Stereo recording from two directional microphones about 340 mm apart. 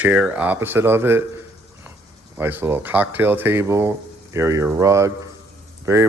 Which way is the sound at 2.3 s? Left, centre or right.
Centre.